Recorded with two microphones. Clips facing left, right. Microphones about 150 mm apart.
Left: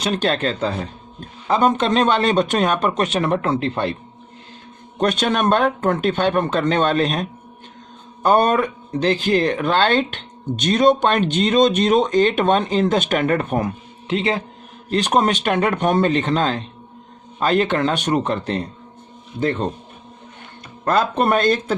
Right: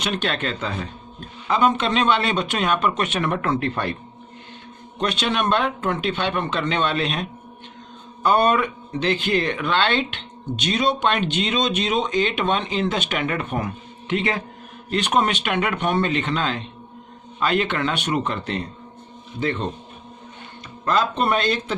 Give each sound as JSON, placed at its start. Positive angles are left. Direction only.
{"t": 0.0, "sound": "speech", "side_deg": 35}
{"t": 4.9, "sound": "speech", "side_deg": 45}
{"t": 20.8, "sound": "speech", "side_deg": 50}